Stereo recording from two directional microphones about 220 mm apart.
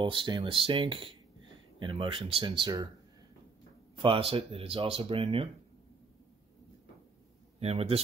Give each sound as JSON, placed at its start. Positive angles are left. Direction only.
{"t": 0.0, "sound": "speech", "side_deg": -20}
{"t": 4.0, "sound": "speech", "side_deg": -25}
{"t": 7.6, "sound": "speech", "side_deg": -25}